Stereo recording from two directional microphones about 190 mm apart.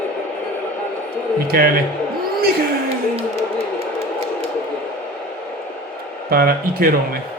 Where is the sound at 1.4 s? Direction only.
50° right (ahead or behind).